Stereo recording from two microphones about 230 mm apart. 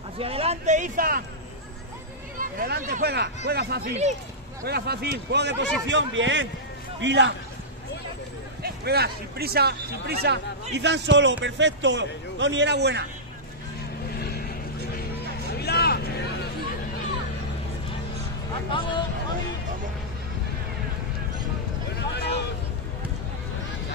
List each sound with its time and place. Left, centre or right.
0.2 s a man's voice: right
2.3 s speech: right
8.6 s speech: right
14.1 s vehicle: left
15.4 s vehicle: left
18.7 s speech: left
22.1 s vehicle: left